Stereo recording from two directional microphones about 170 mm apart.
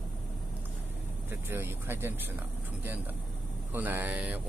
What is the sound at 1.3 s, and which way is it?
Speech, 15° right (ahead or behind).